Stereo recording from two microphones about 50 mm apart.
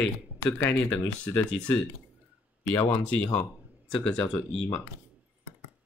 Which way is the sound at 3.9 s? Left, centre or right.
Centre.